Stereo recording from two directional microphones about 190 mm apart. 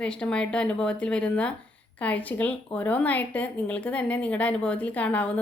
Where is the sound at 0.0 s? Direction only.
5° left (ahead or behind).